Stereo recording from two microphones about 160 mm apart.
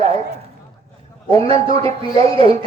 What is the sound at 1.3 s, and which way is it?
Speech, 35° right (ahead or behind).